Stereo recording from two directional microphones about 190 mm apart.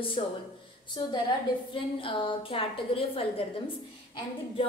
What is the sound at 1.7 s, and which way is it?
A woman's voice, 25° left (ahead or behind).